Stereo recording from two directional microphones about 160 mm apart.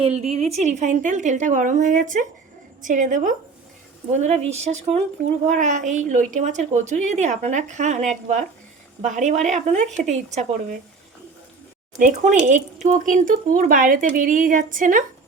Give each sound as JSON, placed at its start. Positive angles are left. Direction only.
{"t": 0.0, "sound": "a woman's voice", "side_deg": -40}
{"t": 11.9, "sound": "speech", "side_deg": -50}